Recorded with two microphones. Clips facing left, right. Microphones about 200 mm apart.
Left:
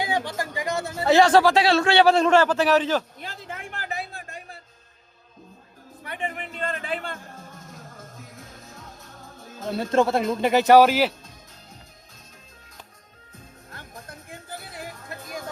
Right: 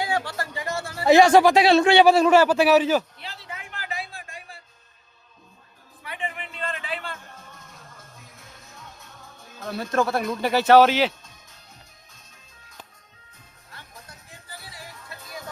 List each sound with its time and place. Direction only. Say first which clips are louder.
0.0 s speech: left 1 dB; 15° left (ahead or behind)
1.0 s a man's voice: right 2 dB; 15° right (ahead or behind)
3.2 s a sound: left 3 dB; 50° left (ahead or behind)
6.0 s a man's voice: left 2 dB; 45° left (ahead or behind)
8.7 s music: left 2 dB; 35° left (ahead or behind)
9.6 s a man's voice: left 3 dB; 25° left (ahead or behind)
13.7 s music: left 4 dB; 50° left (ahead or behind)